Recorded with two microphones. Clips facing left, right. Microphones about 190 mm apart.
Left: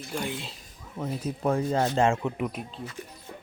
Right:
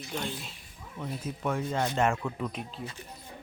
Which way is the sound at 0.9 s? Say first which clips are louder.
Left 5 dB; 40° left (ahead or behind).